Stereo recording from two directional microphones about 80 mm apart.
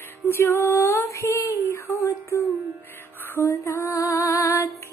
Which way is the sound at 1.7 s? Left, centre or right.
Left.